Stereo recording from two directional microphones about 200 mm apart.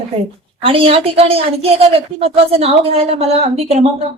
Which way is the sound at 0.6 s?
25° right (ahead or behind).